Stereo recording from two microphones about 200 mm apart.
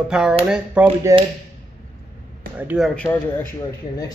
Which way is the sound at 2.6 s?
10° right (ahead or behind).